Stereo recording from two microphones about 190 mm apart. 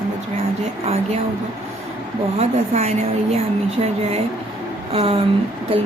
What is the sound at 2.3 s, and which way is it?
A woman's voice, 35° right (ahead or behind).